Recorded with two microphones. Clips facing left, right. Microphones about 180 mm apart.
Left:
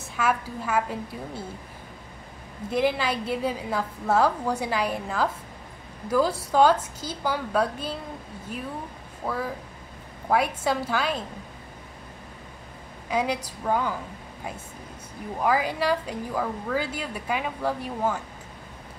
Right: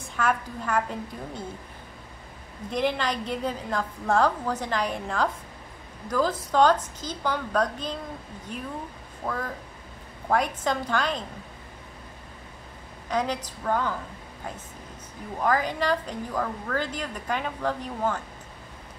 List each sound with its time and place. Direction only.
0.1 s a woman's voice: 5° left (ahead or behind)
2.7 s a woman's voice: 5° left (ahead or behind)
13.1 s a woman's voice: 10° left (ahead or behind)
15.4 s a woman's voice: 10° left (ahead or behind)